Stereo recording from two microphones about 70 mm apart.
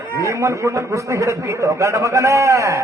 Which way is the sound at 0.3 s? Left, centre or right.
Right.